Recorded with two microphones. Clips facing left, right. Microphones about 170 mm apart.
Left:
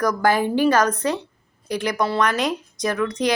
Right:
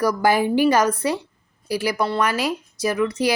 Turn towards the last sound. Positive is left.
turn(degrees=-5)  # may be behind; listen again after turning